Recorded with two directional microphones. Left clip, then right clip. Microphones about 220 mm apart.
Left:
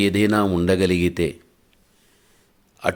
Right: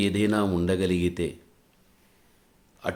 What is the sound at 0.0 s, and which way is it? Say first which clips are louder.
Speech: left 6 dB; 25° left (ahead or behind).